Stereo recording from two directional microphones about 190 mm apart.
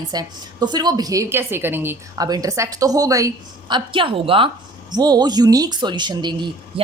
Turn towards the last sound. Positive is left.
turn(degrees=-25)  # may be behind; listen again after turning